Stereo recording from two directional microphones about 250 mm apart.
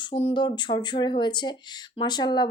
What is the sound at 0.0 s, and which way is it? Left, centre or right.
Speech, left.